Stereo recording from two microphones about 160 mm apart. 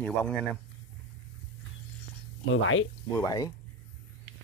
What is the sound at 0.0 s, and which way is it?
Speech, 5° left (ahead or behind).